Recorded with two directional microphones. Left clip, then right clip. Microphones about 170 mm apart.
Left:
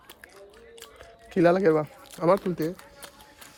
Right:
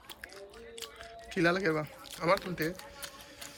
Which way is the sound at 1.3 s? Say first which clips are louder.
Left 9 dB; 45° left (ahead or behind).